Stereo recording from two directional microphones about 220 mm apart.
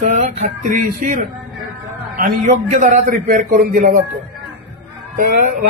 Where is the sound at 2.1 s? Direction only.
35° right (ahead or behind).